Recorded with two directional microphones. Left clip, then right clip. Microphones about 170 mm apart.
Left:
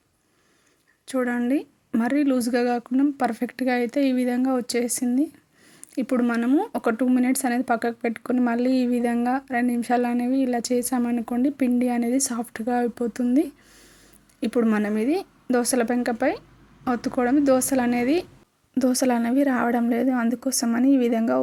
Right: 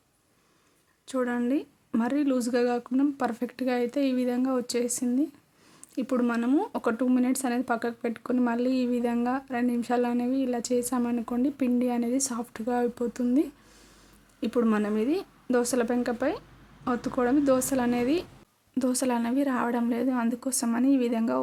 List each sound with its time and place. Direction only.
1.0 s speech: 15° left (ahead or behind)